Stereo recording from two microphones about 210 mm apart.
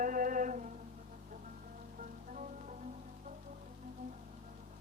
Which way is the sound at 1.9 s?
35° right (ahead or behind).